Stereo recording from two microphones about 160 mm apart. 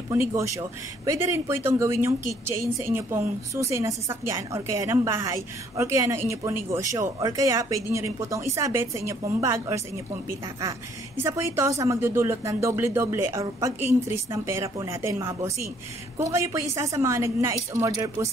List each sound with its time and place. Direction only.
0.1 s a woman's voice: 15° right (ahead or behind)
11.2 s a woman's voice: 15° right (ahead or behind)